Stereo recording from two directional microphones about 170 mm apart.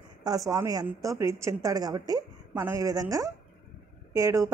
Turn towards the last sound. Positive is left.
turn(degrees=-20)  # may be behind; listen again after turning